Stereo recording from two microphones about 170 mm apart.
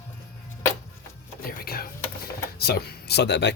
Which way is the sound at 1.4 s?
60° left (ahead or behind).